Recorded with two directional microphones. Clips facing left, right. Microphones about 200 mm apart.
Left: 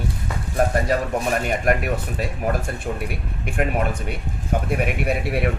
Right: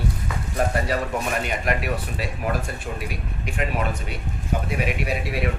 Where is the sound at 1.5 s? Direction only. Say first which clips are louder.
Left 4 dB; 45° left (ahead or behind).